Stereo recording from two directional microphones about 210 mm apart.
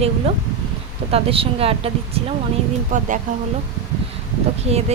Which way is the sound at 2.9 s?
40° right (ahead or behind).